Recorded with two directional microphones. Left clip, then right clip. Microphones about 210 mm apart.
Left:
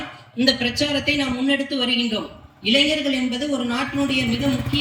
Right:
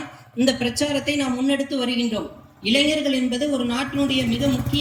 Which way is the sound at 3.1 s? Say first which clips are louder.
Right 1 dB; 10° right (ahead or behind).